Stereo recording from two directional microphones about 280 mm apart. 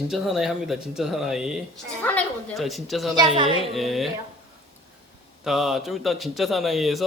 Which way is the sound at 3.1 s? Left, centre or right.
Centre.